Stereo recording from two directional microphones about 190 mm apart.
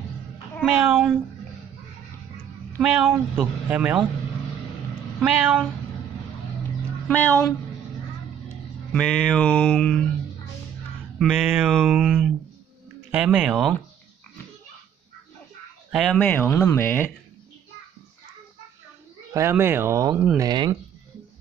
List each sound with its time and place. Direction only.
0.7 s speech: 10° right (ahead or behind)
2.8 s speech: 5° right (ahead or behind)
5.2 s speech: 5° right (ahead or behind)
7.1 s speech: 10° left (ahead or behind)
11.3 s speech: 10° right (ahead or behind)
15.9 s speech: centre (ahead or behind)
16.2 s speech: 10° left (ahead or behind)
19.3 s speech: 15° right (ahead or behind)